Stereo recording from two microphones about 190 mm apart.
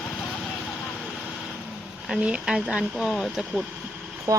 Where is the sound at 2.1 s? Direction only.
5° right (ahead or behind).